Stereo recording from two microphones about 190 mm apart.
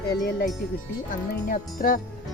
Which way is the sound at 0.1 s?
55° left (ahead or behind).